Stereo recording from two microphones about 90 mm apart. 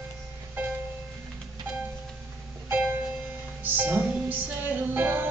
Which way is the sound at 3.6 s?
20° right (ahead or behind).